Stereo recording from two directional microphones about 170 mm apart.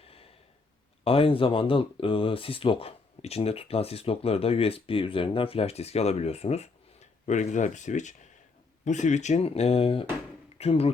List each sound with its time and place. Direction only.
1.0 s speech: 35° left (ahead or behind)